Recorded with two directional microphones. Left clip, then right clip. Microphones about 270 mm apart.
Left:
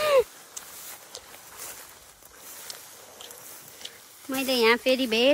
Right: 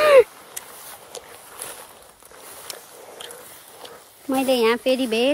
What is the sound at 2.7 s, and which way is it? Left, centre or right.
Biting, right.